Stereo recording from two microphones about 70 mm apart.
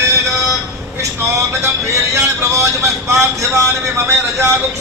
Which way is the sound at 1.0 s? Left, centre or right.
Right.